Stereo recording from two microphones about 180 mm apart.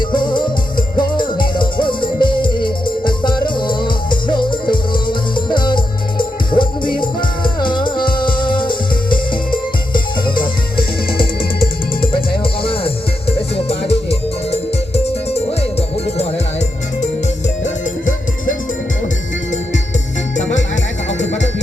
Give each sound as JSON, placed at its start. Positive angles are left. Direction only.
{"t": 0.0, "sound": "music", "side_deg": 25}
{"t": 12.3, "sound": "music", "side_deg": 30}
{"t": 17.6, "sound": "music", "side_deg": 45}
{"t": 20.3, "sound": "music", "side_deg": 40}